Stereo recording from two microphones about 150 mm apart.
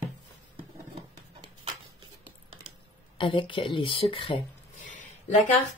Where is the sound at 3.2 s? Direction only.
35° left (ahead or behind).